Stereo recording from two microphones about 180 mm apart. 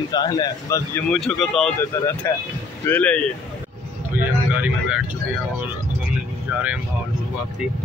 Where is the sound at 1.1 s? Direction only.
Centre (ahead or behind).